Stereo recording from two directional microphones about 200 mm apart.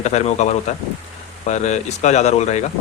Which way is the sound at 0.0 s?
35° left (ahead or behind).